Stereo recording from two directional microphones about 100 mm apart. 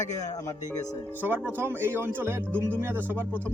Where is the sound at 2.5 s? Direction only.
15° left (ahead or behind).